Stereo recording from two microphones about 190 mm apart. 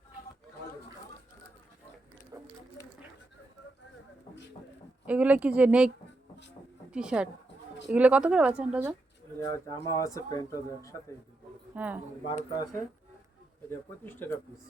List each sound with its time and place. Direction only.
2.3 s a sound: 15° right (ahead or behind)
5.0 s a woman's voice: 5° right (ahead or behind)
6.9 s a woman's voice: 5° right (ahead or behind)
9.4 s speech: 15° left (ahead or behind)
11.7 s a woman's voice: 10° right (ahead or behind)
12.3 s speech: 25° left (ahead or behind)
13.7 s speech: 10° left (ahead or behind)